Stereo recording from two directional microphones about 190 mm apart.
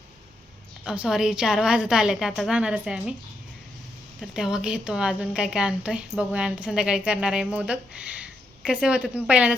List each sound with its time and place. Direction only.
0.9 s a woman's voice: 5° right (ahead or behind)
4.2 s a woman's voice: 5° right (ahead or behind)